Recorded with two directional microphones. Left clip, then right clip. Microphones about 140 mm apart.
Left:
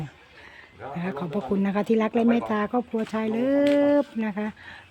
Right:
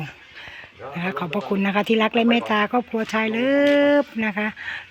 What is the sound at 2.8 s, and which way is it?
Speech, 10° right (ahead or behind).